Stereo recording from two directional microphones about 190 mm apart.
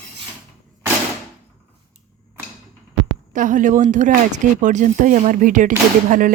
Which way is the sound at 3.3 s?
45° right (ahead or behind).